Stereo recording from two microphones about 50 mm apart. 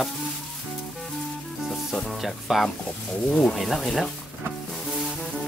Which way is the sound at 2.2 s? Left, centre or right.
Centre.